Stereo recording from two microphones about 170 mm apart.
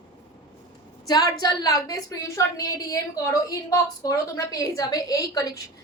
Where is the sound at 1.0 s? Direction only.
25° left (ahead or behind).